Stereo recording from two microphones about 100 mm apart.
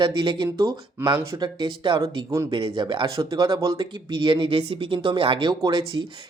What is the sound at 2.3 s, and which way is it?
Speech, 35° right (ahead or behind).